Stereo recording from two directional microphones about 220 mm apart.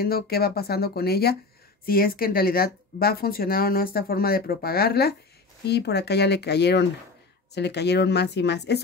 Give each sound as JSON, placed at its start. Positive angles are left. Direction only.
{"t": 0.0, "sound": "speech", "side_deg": 45}